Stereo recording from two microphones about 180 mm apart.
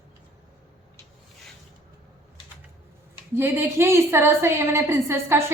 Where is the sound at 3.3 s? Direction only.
15° right (ahead or behind).